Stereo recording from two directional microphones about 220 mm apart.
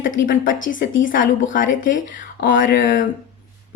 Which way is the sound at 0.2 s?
35° left (ahead or behind).